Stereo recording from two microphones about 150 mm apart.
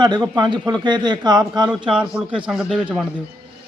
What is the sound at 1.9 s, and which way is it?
A man's voice, 5° right (ahead or behind).